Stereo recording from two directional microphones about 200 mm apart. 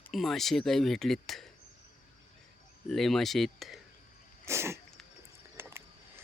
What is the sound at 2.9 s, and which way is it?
Speech, centre (ahead or behind).